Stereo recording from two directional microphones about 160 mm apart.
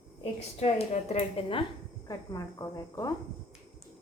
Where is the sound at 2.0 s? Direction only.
20° left (ahead or behind).